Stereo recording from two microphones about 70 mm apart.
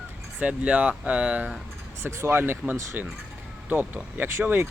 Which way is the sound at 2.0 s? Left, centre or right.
Right.